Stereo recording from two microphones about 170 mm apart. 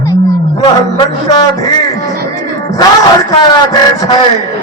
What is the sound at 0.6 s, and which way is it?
Music, 25° left (ahead or behind).